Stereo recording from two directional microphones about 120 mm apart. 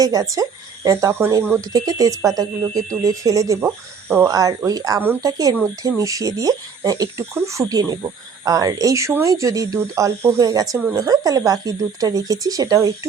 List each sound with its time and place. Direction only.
0.0 s a woman's voice: 30° right (ahead or behind)